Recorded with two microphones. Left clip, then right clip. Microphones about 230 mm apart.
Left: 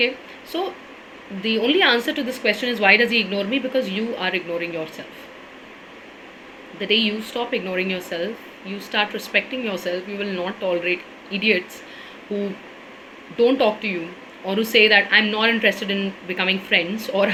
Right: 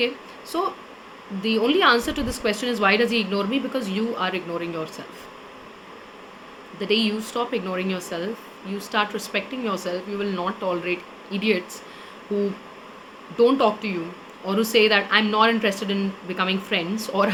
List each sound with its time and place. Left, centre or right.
0.5 s speech: centre
6.7 s speech: centre
13.3 s speech: centre